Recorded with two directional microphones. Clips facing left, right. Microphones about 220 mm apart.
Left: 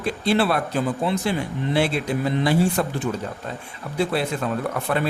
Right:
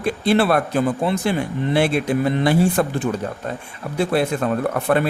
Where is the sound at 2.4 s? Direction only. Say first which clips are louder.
Right 1 dB; 55° right (ahead or behind).